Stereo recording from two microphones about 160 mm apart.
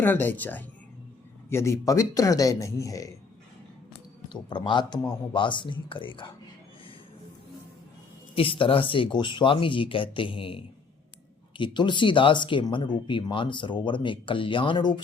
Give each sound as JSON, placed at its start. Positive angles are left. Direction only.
{"t": 0.0, "sound": "speech", "side_deg": 10}
{"t": 4.3, "sound": "speech", "side_deg": 30}
{"t": 8.4, "sound": "speech", "side_deg": 35}